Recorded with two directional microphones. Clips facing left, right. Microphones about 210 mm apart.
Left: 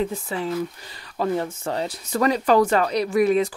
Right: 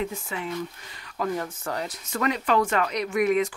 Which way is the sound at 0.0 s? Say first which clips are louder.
Left 5 dB; 35° left (ahead or behind).